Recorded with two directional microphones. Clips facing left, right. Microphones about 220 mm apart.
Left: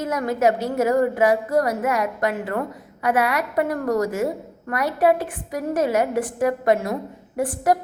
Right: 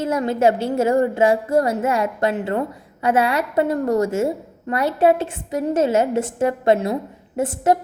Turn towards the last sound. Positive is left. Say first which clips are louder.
# right 2 dB
turn(degrees=-25)  # may be behind; listen again after turning